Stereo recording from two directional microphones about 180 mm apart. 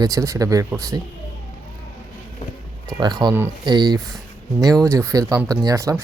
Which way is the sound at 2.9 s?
25° right (ahead or behind).